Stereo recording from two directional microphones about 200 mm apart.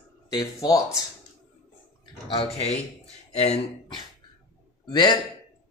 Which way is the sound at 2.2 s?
30° left (ahead or behind).